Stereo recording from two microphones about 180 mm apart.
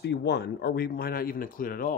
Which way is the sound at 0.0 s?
65° left (ahead or behind).